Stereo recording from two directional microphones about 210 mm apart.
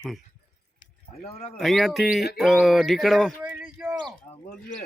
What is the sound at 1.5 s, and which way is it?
A man's voice, centre (ahead or behind).